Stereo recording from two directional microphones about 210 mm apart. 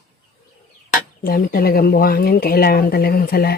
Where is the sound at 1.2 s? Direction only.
45° left (ahead or behind).